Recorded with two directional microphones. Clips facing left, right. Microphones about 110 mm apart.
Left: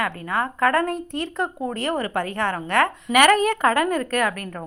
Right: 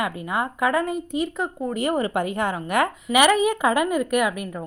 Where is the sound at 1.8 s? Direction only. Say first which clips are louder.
Right 3 dB; 15° right (ahead or behind).